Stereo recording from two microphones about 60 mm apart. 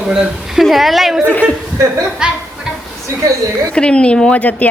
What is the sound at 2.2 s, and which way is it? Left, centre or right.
Speech, centre.